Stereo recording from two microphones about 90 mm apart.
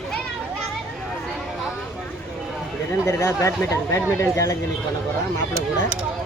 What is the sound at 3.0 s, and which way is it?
Speech, 40° left (ahead or behind).